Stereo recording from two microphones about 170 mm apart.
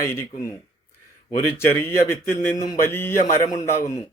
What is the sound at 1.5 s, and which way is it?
Speech, 15° left (ahead or behind).